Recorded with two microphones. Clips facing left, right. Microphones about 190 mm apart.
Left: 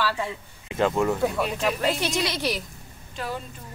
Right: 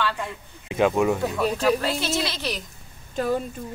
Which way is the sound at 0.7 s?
15° right (ahead or behind).